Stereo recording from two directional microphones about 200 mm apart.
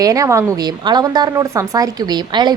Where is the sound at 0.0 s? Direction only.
15° right (ahead or behind).